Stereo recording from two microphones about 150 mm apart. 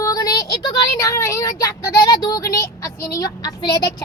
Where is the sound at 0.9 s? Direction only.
20° left (ahead or behind).